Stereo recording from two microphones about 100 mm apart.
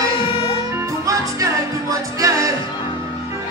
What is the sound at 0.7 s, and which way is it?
Music, 30° right (ahead or behind).